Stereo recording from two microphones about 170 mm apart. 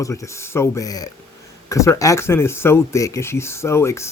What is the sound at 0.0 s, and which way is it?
Speech, 20° left (ahead or behind).